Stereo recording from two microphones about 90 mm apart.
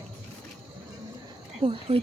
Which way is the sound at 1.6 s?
80° right.